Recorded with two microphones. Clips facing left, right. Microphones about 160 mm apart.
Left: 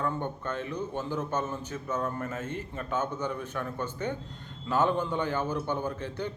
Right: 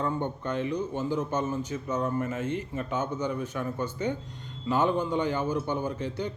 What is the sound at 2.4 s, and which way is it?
Speech, 45° left (ahead or behind).